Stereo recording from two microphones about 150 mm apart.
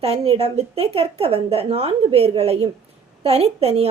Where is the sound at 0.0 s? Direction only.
40° right (ahead or behind).